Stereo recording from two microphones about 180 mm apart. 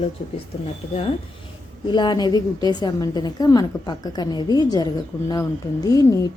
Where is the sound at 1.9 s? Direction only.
25° left (ahead or behind).